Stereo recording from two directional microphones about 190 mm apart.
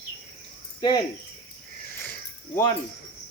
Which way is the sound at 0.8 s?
25° left (ahead or behind).